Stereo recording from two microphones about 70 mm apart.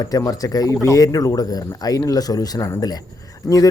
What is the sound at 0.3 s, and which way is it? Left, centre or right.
Speech, left.